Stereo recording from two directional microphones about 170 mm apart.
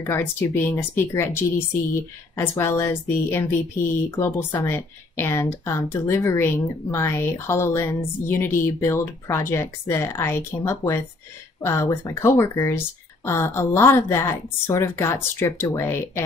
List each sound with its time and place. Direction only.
0.0 s speech: 15° left (ahead or behind)